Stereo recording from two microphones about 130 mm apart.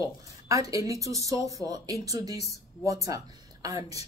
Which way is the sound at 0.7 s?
25° right (ahead or behind).